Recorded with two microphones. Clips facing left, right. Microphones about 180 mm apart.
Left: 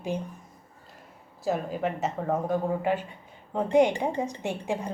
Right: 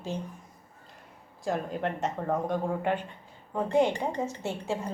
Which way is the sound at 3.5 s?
20° left (ahead or behind).